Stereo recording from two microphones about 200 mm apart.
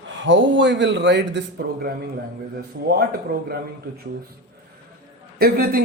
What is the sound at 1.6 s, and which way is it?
Speech, 50° right (ahead or behind).